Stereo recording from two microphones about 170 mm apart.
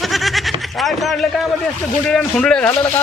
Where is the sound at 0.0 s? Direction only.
Centre (ahead or behind).